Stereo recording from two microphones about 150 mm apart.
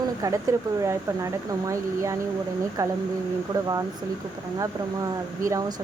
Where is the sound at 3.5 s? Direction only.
30° right (ahead or behind).